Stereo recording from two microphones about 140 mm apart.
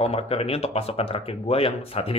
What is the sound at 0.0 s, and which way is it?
Speech, 45° left (ahead or behind).